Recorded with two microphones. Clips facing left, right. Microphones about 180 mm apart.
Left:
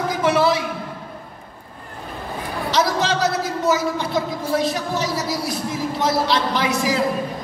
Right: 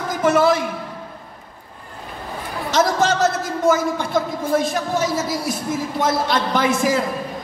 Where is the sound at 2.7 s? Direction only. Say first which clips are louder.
Right 3 dB; 45° right (ahead or behind).